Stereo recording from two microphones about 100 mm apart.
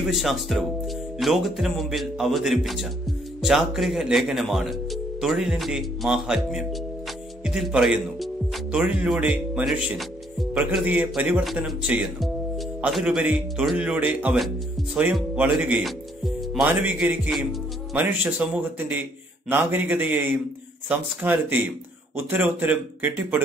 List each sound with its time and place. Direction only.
0.0 s speech: centre (ahead or behind)
15.8 s music: centre (ahead or behind)
16.6 s speech: 15° right (ahead or behind)
17.3 s speech: 5° right (ahead or behind)
17.9 s speech: 20° right (ahead or behind)